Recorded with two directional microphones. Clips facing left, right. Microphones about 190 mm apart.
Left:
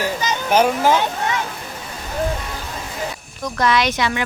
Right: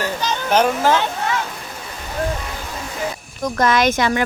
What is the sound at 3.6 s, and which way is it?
Speech, 45° right (ahead or behind).